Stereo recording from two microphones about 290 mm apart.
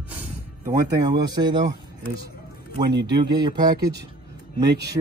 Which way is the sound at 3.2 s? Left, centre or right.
Centre.